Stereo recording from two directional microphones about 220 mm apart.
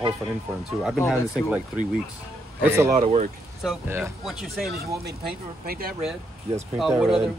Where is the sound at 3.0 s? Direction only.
35° right (ahead or behind).